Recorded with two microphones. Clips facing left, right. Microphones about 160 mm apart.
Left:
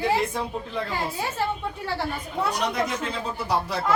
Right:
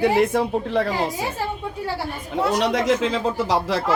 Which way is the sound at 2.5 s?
90° right.